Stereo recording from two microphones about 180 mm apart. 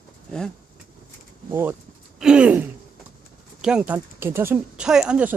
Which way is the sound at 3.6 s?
5° right (ahead or behind).